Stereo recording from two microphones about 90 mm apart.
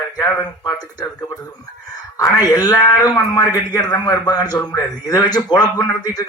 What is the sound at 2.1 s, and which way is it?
A man's voice, 40° left (ahead or behind).